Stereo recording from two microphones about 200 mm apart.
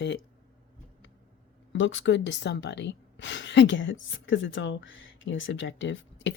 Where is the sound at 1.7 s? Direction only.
70° left (ahead or behind).